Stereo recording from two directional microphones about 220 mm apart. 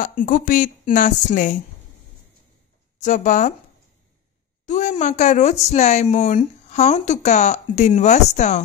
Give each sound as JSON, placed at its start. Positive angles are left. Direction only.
{"t": 0.0, "sound": "speech", "side_deg": 35}
{"t": 3.0, "sound": "speech", "side_deg": 35}
{"t": 4.6, "sound": "speech", "side_deg": 35}